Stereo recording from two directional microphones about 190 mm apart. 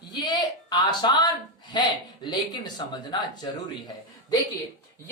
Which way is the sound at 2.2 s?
25° left (ahead or behind).